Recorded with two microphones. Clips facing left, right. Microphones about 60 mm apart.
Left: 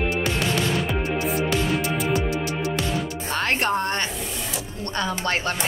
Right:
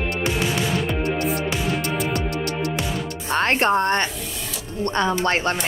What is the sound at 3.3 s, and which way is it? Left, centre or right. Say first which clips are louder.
A woman's voice: right 5 dB; right.